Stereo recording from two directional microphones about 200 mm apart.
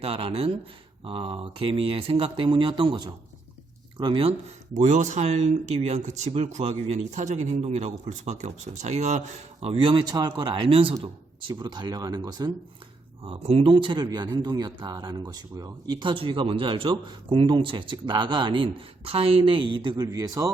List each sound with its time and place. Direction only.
0.0 s speech: 25° right (ahead or behind)